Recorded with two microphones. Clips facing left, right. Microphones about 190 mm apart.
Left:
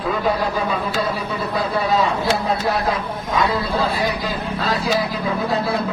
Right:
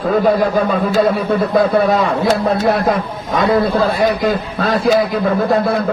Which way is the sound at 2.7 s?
55° right (ahead or behind).